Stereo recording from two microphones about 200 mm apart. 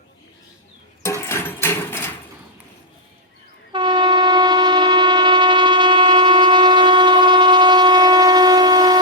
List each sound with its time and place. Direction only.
1.2 s a sound: 10° left (ahead or behind)
1.6 s hammer: 10° left (ahead or behind)
3.7 s train: 25° right (ahead or behind)